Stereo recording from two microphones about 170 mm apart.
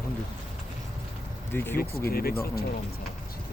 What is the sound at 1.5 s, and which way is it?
Speech, 15° left (ahead or behind).